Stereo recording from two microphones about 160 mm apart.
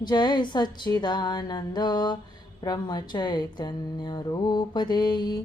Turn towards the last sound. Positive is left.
turn(degrees=25)  # may be behind; listen again after turning